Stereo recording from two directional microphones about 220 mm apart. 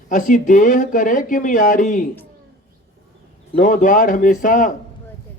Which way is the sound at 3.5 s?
40° left (ahead or behind).